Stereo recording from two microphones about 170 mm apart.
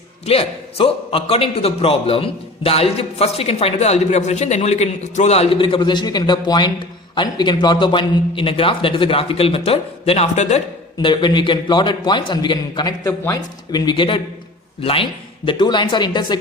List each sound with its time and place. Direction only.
0.3 s a man's voice: 35° left (ahead or behind)
11.0 s a man's voice: 25° left (ahead or behind)